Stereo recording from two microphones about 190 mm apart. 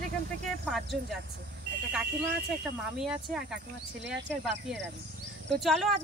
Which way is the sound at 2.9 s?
5° right (ahead or behind).